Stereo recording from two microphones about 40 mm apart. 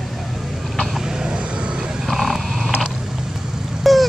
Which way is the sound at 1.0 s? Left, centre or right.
Centre.